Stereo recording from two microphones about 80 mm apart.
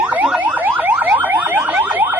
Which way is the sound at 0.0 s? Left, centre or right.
Centre.